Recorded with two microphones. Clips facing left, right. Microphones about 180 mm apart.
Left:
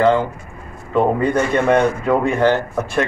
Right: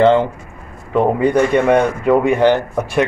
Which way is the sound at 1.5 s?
15° right (ahead or behind).